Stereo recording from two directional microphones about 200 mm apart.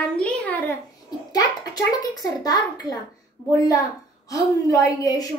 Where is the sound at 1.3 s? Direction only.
20° left (ahead or behind).